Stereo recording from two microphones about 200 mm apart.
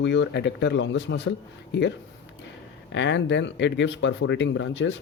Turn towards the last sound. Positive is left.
turn(degrees=65)  # may be behind; listen again after turning